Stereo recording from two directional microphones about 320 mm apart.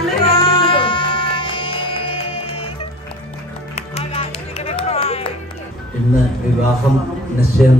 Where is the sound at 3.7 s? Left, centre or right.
Centre.